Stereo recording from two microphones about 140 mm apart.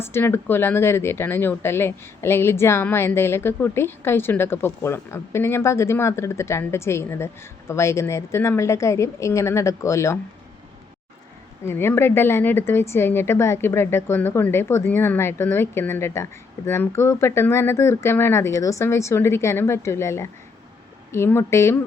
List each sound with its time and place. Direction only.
0.0 s a woman's voice: 15° left (ahead or behind)
11.6 s a woman's voice: 15° left (ahead or behind)